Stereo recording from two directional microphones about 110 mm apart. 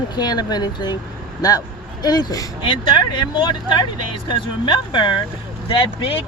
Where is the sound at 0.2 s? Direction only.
40° left (ahead or behind).